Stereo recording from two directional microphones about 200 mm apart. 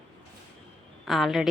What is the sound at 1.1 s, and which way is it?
Speech, centre (ahead or behind).